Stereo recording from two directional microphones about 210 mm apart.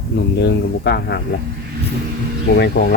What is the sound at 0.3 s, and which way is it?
Speech, 55° left (ahead or behind).